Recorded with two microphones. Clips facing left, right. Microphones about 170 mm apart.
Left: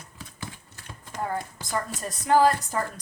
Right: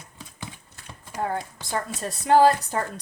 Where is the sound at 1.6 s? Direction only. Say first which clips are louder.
Right 1 dB; 30° right (ahead or behind).